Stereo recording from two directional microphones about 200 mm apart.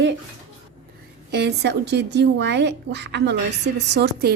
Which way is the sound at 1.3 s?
55° right (ahead or behind).